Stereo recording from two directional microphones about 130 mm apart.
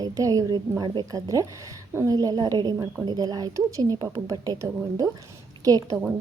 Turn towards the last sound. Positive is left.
turn(degrees=-30)  # may be behind; listen again after turning